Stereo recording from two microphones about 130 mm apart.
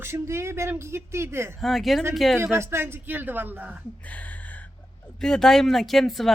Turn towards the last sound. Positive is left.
turn(degrees=0)  # may be behind; listen again after turning